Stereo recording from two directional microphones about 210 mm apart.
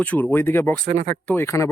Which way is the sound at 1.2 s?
10° left (ahead or behind).